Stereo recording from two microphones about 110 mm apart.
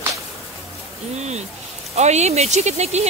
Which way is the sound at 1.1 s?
85° right.